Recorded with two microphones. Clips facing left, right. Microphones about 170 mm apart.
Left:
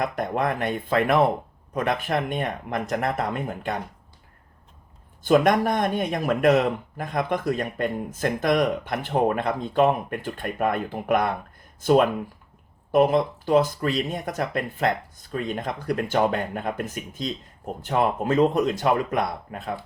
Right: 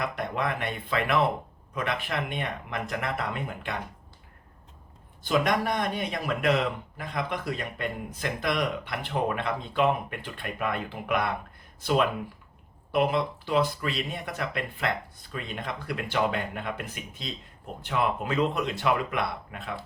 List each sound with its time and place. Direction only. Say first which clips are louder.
0.0 s speech: left 5 dB; 45° left (ahead or behind)
5.2 s speech: left 7 dB; 45° left (ahead or behind)